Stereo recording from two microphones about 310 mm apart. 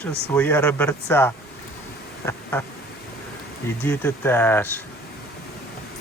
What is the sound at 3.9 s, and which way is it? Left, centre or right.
Speech, centre.